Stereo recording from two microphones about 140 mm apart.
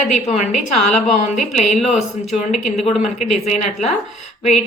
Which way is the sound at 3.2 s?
55° left (ahead or behind).